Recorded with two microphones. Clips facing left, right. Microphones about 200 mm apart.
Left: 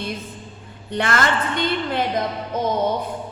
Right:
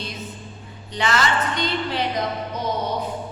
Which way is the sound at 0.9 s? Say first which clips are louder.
Left 1 dB; 55° left (ahead or behind).